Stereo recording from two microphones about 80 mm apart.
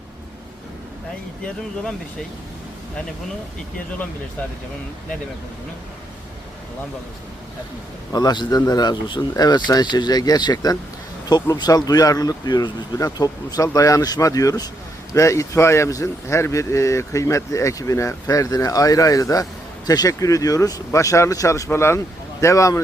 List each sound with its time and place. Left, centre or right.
8.1 s speech: left
9.3 s speech: left
15.1 s speech: left